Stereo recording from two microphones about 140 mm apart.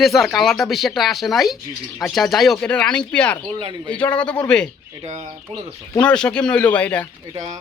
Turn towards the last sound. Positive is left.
turn(degrees=10)  # may be behind; listen again after turning